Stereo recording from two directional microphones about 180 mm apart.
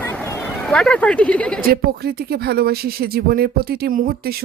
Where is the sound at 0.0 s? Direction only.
10° left (ahead or behind).